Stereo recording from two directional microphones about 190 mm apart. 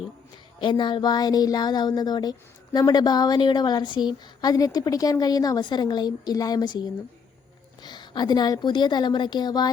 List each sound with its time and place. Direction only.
0.6 s a woman's voice: 25° left (ahead or behind)